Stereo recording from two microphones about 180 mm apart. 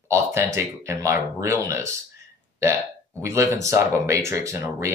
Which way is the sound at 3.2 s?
15° right (ahead or behind).